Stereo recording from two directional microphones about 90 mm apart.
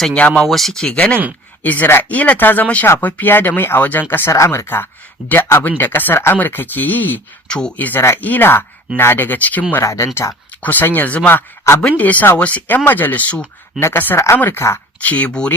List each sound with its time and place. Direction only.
0.0 s speech: 10° left (ahead or behind)
4.3 s speech: 35° left (ahead or behind); by 9.6 s 20° left (ahead or behind)
9.8 s speech: 35° left (ahead or behind)
10.6 s speech: 20° left (ahead or behind)
13.7 s speech: 25° left (ahead or behind); by 15.5 s 10° left (ahead or behind)